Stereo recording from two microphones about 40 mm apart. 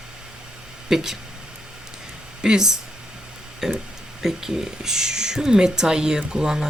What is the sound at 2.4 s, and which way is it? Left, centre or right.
Speech, centre.